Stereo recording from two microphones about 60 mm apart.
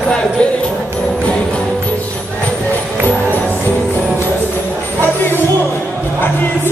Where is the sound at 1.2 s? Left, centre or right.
Centre.